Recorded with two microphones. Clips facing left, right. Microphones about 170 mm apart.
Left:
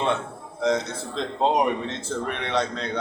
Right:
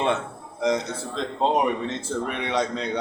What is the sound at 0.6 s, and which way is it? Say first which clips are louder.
Speech: even; 10° right (ahead or behind).